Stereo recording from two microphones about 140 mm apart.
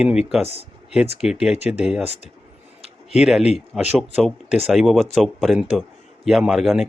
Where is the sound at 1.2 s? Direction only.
5° right (ahead or behind).